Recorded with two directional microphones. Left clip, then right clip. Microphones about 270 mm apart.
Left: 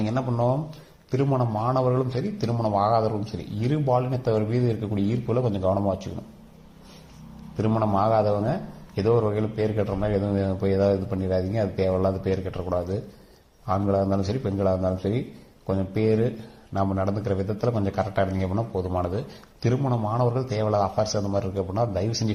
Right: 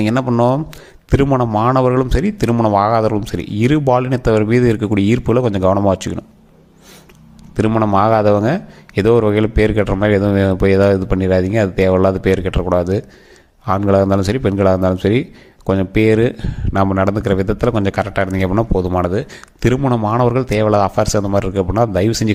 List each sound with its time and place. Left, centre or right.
0.0 s a man's voice: right
7.5 s a man's voice: right